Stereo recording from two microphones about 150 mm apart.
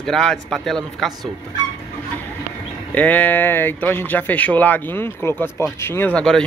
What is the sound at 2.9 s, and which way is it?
A man's voice, 10° left (ahead or behind).